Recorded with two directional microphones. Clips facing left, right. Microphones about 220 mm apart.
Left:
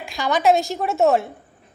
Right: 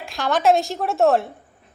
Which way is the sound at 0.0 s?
Centre (ahead or behind).